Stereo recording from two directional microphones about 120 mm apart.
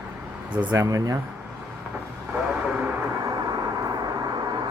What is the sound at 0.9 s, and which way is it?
Speech, 30° right (ahead or behind).